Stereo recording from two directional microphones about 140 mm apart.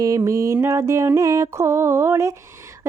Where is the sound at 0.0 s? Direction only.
25° right (ahead or behind).